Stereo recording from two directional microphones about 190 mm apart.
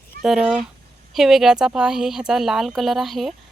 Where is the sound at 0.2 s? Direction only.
Centre (ahead or behind).